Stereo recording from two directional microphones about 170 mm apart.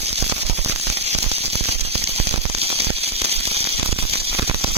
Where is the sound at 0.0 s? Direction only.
40° right (ahead or behind).